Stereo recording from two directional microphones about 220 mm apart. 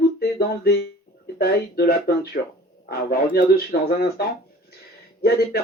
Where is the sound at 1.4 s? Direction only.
45° left (ahead or behind).